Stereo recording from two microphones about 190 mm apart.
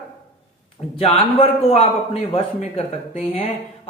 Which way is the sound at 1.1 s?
30° left (ahead or behind).